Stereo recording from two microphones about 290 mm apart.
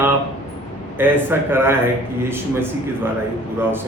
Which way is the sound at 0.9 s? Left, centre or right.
Centre.